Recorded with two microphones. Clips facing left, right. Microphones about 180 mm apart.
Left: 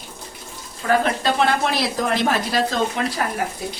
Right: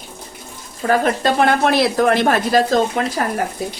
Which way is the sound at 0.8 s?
45° right (ahead or behind).